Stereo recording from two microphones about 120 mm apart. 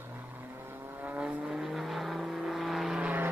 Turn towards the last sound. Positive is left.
turn(degrees=-10)  # may be behind; listen again after turning